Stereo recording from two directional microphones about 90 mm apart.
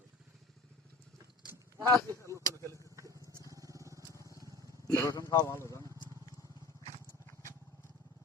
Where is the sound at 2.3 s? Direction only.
35° right (ahead or behind).